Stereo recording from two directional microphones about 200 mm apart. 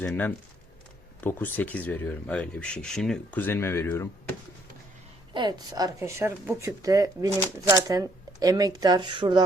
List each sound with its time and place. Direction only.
0.0 s speech: 10° left (ahead or behind)
5.3 s speech: 20° right (ahead or behind)